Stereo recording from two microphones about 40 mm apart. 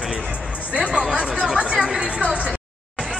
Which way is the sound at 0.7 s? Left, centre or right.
Right.